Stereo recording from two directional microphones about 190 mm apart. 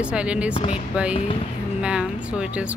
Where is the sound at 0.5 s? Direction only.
25° left (ahead or behind).